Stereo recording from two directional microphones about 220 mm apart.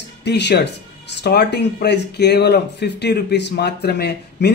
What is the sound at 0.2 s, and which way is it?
A man's voice, 50° left (ahead or behind).